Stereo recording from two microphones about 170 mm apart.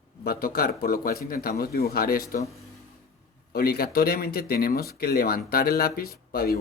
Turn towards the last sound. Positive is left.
turn(degrees=65)  # may be behind; listen again after turning